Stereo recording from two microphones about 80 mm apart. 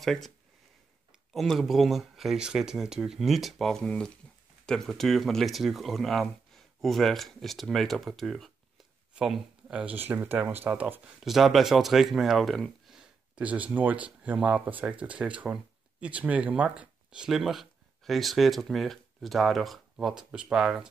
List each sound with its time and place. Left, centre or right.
0.0 s speech: centre
1.3 s speech: centre
4.2 s a sound: centre
4.6 s speech: centre
9.8 s speech: right
11.1 s speech: centre
13.5 s speech: centre